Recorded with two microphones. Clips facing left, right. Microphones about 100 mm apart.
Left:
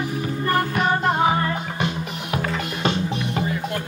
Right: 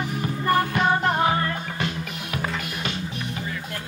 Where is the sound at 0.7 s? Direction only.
5° left (ahead or behind); by 2.4 s 20° left (ahead or behind).